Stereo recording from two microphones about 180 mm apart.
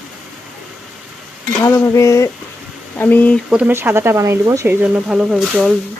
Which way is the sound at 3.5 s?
10° right (ahead or behind).